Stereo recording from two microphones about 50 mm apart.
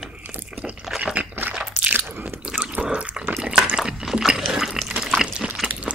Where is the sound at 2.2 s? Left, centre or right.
Right.